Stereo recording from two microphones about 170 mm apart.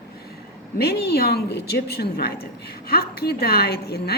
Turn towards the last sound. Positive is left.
turn(degrees=70)  # may be behind; listen again after turning